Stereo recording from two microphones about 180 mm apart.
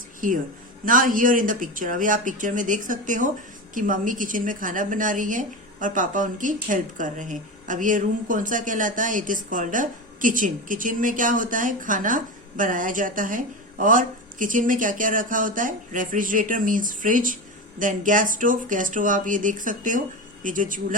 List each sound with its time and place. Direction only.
0.2 s a woman's voice: 50° right (ahead or behind)